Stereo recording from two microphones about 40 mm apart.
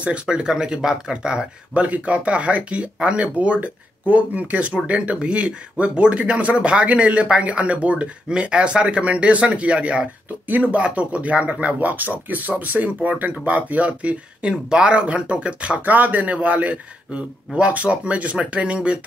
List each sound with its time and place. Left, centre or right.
0.0 s speech: right
10.5 s speech: right
10.8 s speech: right
14.5 s speech: right
15.8 s speech: right